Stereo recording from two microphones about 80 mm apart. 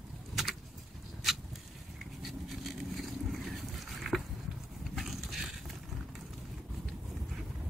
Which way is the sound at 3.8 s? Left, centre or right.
Centre.